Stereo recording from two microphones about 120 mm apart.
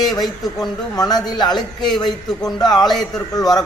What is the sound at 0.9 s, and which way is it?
Speech, 35° left (ahead or behind).